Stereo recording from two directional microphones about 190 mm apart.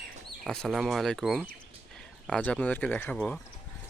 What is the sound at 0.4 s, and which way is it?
Speech, 5° left (ahead or behind).